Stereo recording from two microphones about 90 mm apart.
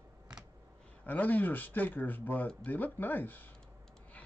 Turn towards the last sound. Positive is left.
turn(degrees=20)  # may be behind; listen again after turning